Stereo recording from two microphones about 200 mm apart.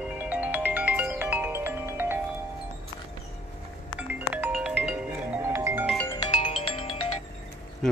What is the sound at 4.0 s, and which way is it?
Music, 10° right (ahead or behind).